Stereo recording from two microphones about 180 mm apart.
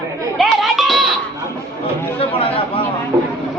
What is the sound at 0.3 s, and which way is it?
Music, centre (ahead or behind).